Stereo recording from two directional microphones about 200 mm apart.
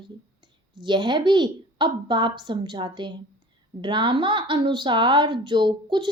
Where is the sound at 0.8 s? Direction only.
25° right (ahead or behind).